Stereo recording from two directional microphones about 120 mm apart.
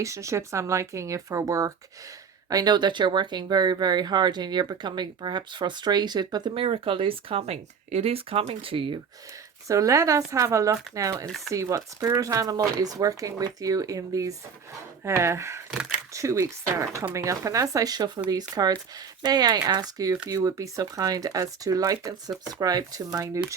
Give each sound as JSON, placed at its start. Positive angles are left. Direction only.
{"t": 0.0, "sound": "speech", "side_deg": -25}
{"t": 6.5, "sound": "speech", "side_deg": -50}
{"t": 9.6, "sound": "speech", "side_deg": -25}
{"t": 11.3, "sound": "speech", "side_deg": 0}
{"t": 11.5, "sound": "speech", "side_deg": -25}